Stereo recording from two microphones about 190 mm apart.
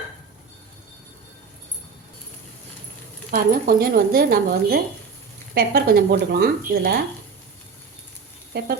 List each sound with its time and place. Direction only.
3.3 s speech: 50° right (ahead or behind)
8.5 s speech: 60° right (ahead or behind)